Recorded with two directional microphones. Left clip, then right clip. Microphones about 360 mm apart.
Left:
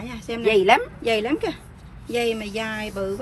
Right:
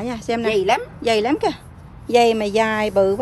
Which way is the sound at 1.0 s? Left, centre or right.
Centre.